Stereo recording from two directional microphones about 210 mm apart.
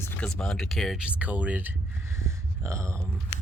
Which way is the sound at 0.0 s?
5° left (ahead or behind).